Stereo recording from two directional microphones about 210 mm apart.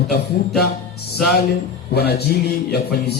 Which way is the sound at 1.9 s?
50° left (ahead or behind).